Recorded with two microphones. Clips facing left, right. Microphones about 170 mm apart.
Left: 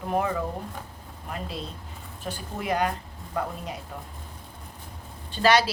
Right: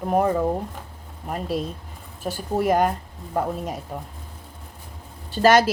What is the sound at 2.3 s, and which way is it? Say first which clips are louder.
Speech: right 8 dB; 45° right (ahead or behind).